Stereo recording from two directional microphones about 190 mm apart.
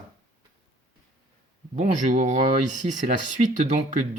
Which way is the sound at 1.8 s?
40° right (ahead or behind).